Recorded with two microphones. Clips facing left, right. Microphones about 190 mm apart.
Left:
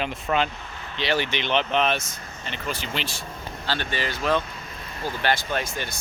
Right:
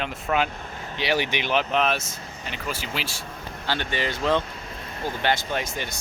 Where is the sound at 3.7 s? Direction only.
20° right (ahead or behind).